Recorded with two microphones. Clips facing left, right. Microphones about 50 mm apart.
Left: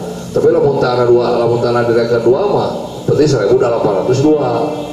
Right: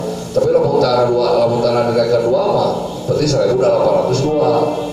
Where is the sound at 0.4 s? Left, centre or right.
Left.